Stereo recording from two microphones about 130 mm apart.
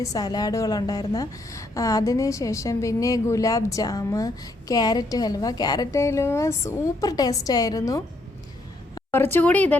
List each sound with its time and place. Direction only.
0.0 s a woman's voice: 30° left (ahead or behind)
9.1 s a woman's voice: 15° left (ahead or behind)